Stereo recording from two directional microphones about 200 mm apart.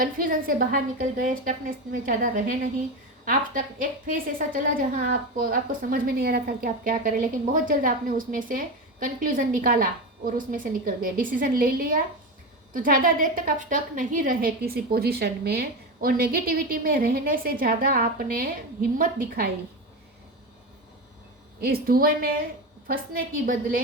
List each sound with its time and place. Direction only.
0.0 s a woman's voice: 45° right (ahead or behind)
21.6 s a woman's voice: 50° right (ahead or behind)